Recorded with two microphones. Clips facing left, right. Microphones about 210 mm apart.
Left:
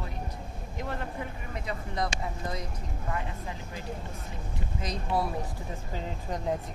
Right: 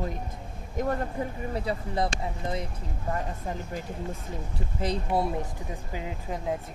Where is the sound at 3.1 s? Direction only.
45° right (ahead or behind).